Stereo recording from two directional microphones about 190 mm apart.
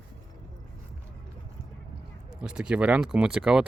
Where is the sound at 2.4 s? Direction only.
5° right (ahead or behind).